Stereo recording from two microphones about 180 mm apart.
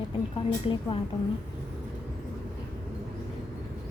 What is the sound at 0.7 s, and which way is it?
Speech, 25° left (ahead or behind).